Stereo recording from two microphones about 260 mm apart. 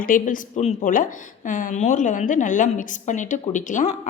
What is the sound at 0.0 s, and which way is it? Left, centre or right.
A woman's voice, left.